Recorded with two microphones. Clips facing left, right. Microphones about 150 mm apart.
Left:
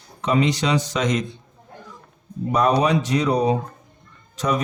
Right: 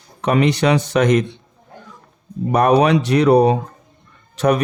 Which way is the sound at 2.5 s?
65° right (ahead or behind).